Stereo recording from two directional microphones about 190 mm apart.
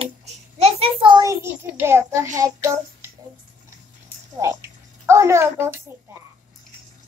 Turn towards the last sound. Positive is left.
turn(degrees=-15)  # may be behind; listen again after turning